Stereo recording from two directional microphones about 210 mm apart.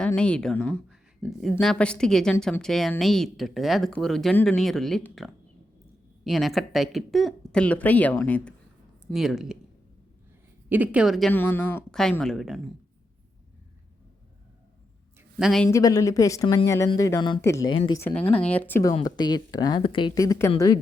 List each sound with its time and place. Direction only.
0.0 s speech: 5° left (ahead or behind)
10.7 s speech: 5° right (ahead or behind)
15.4 s speech: centre (ahead or behind)
15.7 s speech: 15° left (ahead or behind)